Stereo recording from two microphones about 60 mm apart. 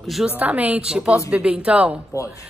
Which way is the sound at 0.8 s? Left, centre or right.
Centre.